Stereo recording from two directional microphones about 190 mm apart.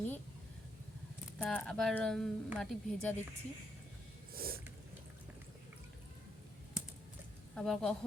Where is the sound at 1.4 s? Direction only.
5° left (ahead or behind).